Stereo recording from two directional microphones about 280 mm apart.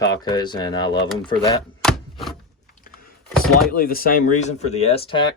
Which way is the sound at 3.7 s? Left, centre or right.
Left.